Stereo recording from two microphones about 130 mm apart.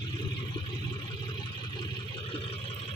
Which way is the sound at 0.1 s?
35° left (ahead or behind).